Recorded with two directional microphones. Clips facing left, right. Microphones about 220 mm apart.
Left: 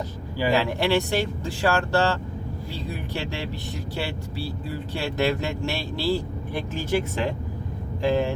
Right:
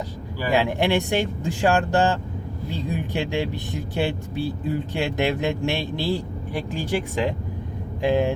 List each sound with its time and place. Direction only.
0.5 s speech: 15° right (ahead or behind)